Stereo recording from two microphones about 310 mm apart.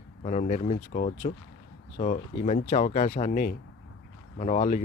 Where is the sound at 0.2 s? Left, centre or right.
Left.